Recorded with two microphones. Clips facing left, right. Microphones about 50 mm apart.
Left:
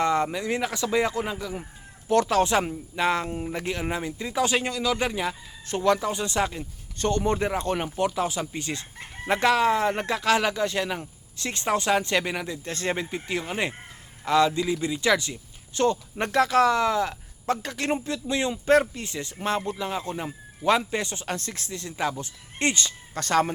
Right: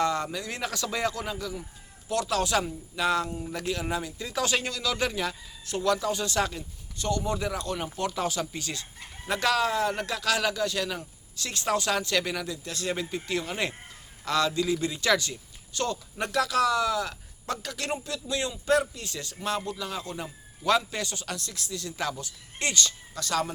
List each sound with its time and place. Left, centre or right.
0.0 s chicken: left
2.0 s speech: left
3.5 s chicken: left
5.6 s chicken: left
6.6 s speech: left
7.9 s chicken: centre
15.7 s chicken: left
23.1 s speech: left